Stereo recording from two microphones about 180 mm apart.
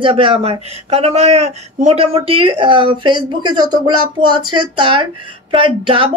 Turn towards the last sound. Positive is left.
turn(degrees=-30)  # may be behind; listen again after turning